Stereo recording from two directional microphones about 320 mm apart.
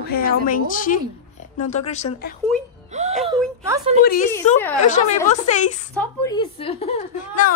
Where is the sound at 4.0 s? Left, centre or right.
Left.